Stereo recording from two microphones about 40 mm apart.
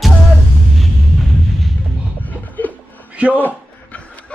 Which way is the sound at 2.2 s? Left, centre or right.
Left.